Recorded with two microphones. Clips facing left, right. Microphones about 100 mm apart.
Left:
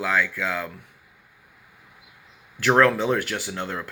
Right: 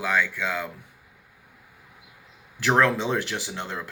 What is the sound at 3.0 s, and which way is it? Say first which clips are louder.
Speech: left 3 dB; 20° right (ahead or behind).